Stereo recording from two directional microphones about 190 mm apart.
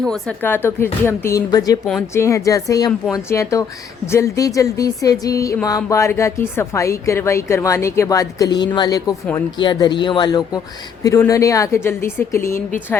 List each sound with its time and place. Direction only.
0.0 s speech: 5° left (ahead or behind)